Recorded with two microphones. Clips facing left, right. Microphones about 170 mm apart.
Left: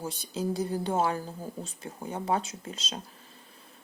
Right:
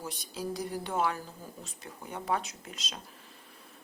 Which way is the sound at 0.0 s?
25° left (ahead or behind).